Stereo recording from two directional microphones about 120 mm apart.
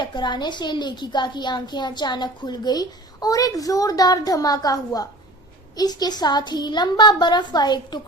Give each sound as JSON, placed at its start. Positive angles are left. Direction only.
{"t": 0.0, "sound": "a child's voice", "side_deg": 40}